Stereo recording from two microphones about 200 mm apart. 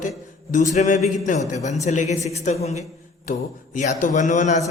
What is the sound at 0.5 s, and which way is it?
A man's voice, 40° left (ahead or behind).